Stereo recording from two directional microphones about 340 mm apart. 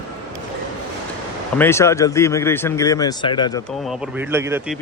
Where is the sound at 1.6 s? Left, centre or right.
Centre.